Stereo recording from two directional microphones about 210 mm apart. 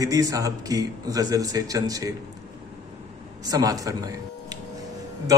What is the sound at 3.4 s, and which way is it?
Speech, 15° right (ahead or behind).